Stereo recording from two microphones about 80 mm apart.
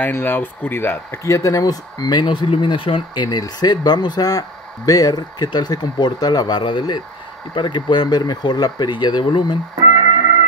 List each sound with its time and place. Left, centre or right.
0.0 s speech: left
2.1 s speech: left